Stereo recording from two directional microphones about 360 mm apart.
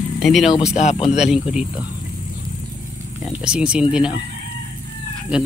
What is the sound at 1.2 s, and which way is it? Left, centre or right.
Speech, centre.